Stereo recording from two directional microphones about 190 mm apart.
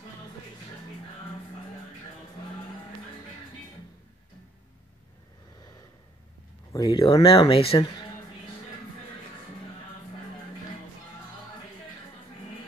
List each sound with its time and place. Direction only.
6.7 s speech: 20° left (ahead or behind)